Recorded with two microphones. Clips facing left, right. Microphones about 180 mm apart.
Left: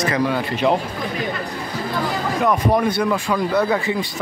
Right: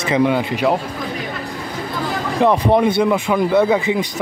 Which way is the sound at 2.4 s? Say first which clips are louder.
Right 4 dB; 25° right (ahead or behind).